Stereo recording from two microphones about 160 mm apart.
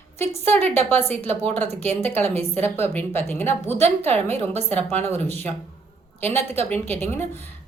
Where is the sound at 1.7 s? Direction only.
40° right (ahead or behind).